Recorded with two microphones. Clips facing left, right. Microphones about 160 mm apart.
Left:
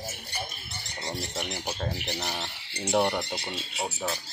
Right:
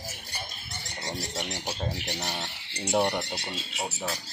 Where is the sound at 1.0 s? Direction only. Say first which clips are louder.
Left 1 dB; 5° left (ahead or behind).